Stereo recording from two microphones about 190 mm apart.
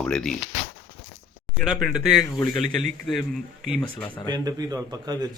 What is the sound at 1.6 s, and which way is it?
Speech, centre (ahead or behind).